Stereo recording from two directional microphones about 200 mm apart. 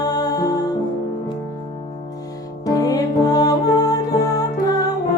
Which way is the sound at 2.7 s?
20° left (ahead or behind).